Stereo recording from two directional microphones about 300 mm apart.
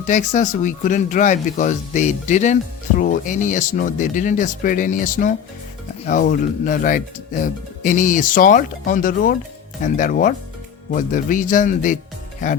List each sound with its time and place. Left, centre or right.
0.1 s speech: left